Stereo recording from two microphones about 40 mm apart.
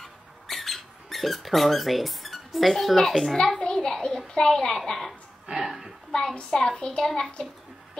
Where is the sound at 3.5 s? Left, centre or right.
Centre.